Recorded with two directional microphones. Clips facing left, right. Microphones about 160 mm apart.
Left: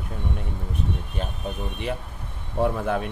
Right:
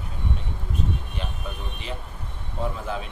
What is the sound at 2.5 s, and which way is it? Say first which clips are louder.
Speech: left 7 dB; 60° left (ahead or behind).